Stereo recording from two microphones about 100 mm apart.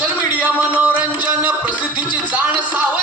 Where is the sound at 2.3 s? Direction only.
15° right (ahead or behind).